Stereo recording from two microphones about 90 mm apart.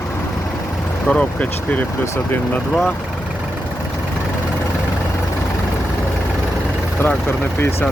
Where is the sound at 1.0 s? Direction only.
15° left (ahead or behind).